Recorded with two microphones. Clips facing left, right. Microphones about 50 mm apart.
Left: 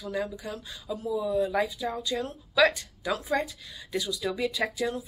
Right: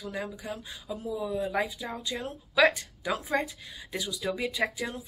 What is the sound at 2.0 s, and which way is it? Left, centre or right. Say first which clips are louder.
Speech: left 4 dB; right.